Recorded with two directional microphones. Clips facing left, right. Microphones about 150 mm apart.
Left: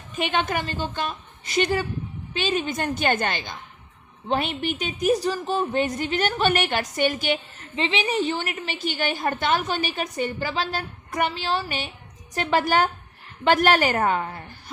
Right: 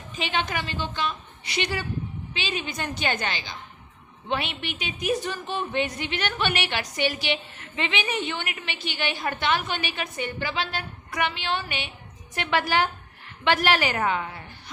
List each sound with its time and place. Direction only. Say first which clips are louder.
0.2 s a woman's voice: left 4 dB; 50° left (ahead or behind)
7.8 s a woman's voice: left 4 dB; 30° left (ahead or behind)